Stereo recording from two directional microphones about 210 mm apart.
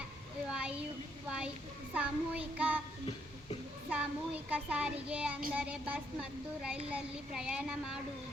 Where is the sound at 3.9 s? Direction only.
5° right (ahead or behind).